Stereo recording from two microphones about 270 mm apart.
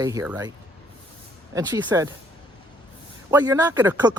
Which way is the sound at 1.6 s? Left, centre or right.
Centre.